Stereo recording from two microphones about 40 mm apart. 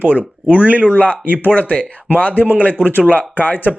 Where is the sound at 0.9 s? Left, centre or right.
Left.